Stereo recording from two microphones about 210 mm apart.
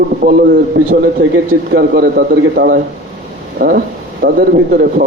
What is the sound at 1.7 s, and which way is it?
A man's voice, 50° right (ahead or behind).